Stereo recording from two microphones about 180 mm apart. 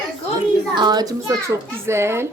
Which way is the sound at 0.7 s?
25° right (ahead or behind).